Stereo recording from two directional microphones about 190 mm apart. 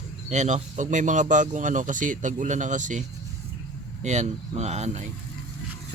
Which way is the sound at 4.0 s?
35° right (ahead or behind).